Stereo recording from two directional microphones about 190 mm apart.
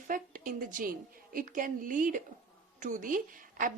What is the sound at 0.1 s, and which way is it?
A woman's voice, 45° right (ahead or behind).